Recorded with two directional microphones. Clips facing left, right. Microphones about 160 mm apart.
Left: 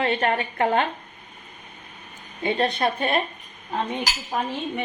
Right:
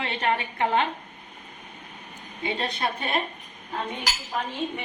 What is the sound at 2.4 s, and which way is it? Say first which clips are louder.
Speech: left 6 dB; 55° left (ahead or behind).